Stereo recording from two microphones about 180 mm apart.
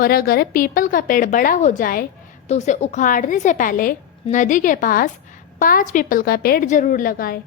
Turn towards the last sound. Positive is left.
turn(degrees=55)  # may be behind; listen again after turning